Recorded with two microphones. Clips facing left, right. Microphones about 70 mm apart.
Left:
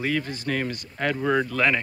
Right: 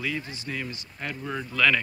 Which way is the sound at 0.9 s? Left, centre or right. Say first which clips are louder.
Left 10 dB; left.